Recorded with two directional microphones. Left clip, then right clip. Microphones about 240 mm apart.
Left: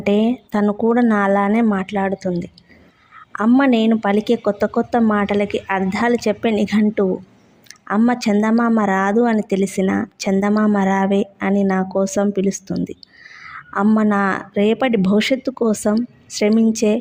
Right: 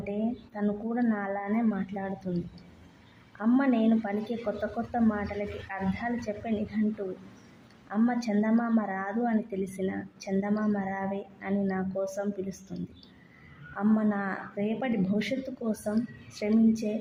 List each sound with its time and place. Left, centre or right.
0.0 s speech: left
7.9 s speech: left